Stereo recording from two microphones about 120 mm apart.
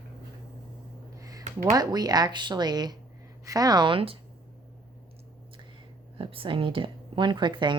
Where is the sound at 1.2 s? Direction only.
30° right (ahead or behind).